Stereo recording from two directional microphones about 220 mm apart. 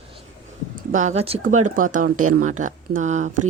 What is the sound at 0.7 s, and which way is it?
A woman's voice, 35° right (ahead or behind).